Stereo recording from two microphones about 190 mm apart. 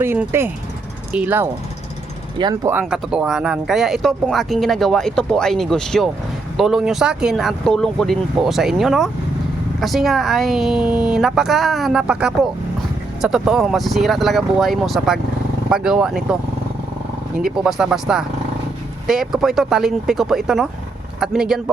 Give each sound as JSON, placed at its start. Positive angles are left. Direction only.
{"t": 0.0, "sound": "speech", "side_deg": -10}
{"t": 2.4, "sound": "speech", "side_deg": -20}
{"t": 2.7, "sound": "speech", "side_deg": -5}
{"t": 17.6, "sound": "speech", "side_deg": 0}